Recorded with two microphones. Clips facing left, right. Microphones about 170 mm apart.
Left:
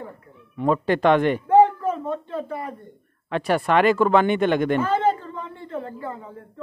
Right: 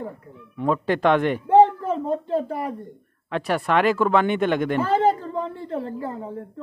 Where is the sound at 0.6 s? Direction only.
Centre (ahead or behind).